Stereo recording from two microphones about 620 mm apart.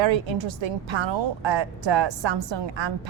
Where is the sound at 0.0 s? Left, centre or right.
Right.